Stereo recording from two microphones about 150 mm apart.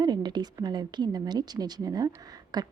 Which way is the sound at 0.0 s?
30° right (ahead or behind).